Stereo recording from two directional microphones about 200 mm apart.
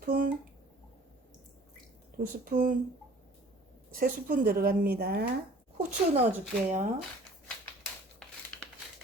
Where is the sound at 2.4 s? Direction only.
40° right (ahead or behind).